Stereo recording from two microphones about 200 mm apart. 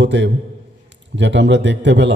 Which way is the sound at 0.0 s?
60° right (ahead or behind).